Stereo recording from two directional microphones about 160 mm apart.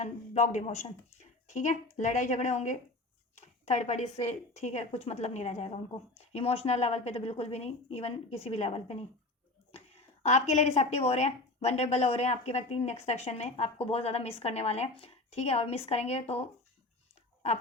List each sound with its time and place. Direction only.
0.0 s a woman's voice: 50° left (ahead or behind)